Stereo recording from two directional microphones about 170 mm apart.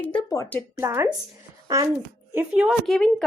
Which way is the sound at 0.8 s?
15° right (ahead or behind).